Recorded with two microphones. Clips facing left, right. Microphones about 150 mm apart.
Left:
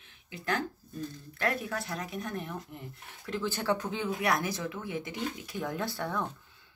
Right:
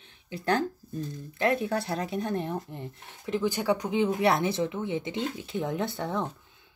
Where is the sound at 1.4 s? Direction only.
25° right (ahead or behind).